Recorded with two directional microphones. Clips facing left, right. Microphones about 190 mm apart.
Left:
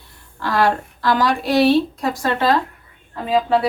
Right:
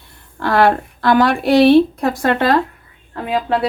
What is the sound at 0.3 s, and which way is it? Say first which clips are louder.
Speech: right 4 dB; 60° right (ahead or behind).